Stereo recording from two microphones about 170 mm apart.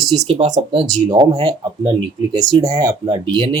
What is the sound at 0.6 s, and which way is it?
Speech, 30° right (ahead or behind).